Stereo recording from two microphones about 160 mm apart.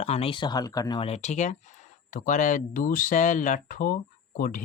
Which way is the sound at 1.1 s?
45° left (ahead or behind).